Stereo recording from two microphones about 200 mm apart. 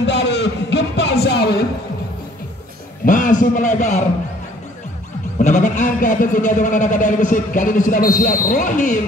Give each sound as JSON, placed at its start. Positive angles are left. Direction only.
{"t": 0.0, "sound": "music", "side_deg": 60}
{"t": 3.1, "sound": "a man's voice", "side_deg": 40}
{"t": 5.4, "sound": "speech", "side_deg": 35}